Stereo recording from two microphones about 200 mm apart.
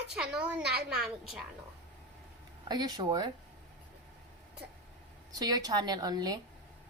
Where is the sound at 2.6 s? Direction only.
20° right (ahead or behind).